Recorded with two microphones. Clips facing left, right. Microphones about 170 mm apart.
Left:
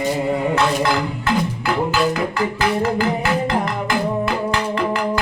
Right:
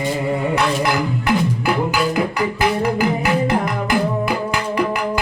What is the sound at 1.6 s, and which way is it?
Music, 15° right (ahead or behind).